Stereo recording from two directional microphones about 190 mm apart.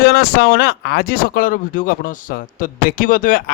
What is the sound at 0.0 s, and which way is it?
Speech, 55° left (ahead or behind).